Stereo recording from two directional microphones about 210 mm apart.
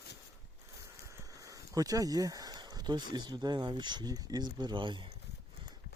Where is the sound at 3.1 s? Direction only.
20° right (ahead or behind).